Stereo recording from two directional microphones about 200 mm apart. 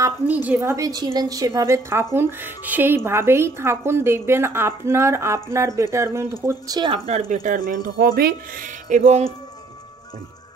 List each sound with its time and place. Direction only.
0.0 s a woman's voice: 10° right (ahead or behind); by 7.3 s 30° right (ahead or behind)
7.4 s speech: 45° right (ahead or behind)